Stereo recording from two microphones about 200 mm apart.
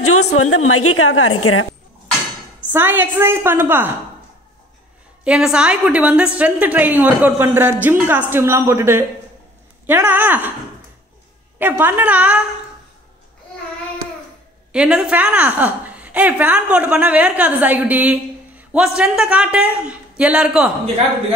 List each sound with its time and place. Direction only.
0.0 s a woman's voice: 90° left
2.7 s a woman's voice: 10° right (ahead or behind)
5.2 s a woman's voice: 5° right (ahead or behind)
11.5 s a woman's voice: 10° right (ahead or behind)
14.7 s a woman's voice: 5° right (ahead or behind)